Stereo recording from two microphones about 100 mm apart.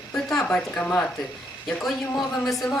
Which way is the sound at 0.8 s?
15° left (ahead or behind).